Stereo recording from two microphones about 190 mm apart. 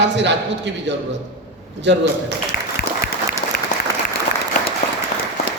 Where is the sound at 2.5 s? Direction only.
50° left (ahead or behind).